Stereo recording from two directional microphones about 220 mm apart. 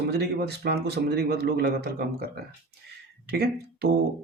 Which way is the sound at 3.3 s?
45° right (ahead or behind).